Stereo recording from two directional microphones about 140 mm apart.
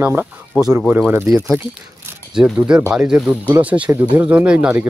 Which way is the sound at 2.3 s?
5° right (ahead or behind).